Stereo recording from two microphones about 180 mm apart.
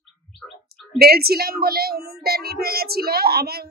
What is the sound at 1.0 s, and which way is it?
A woman's voice, 60° right (ahead or behind).